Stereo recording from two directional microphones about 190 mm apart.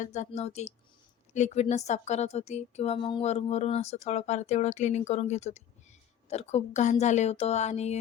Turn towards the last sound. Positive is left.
turn(degrees=35)  # may be behind; listen again after turning